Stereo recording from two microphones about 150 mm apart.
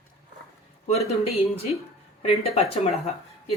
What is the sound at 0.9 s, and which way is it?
Speech, 45° left (ahead or behind).